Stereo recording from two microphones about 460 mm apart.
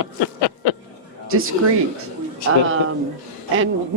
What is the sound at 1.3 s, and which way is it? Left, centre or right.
Speech, right.